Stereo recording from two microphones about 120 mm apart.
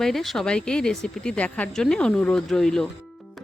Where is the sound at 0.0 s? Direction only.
Centre (ahead or behind).